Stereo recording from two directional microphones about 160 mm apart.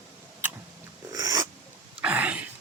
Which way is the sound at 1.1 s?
25° right (ahead or behind).